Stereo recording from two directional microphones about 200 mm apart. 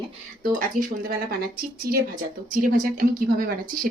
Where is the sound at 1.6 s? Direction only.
50° right (ahead or behind).